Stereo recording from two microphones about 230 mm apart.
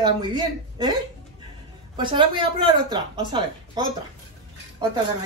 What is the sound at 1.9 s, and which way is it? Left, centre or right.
Speech, right.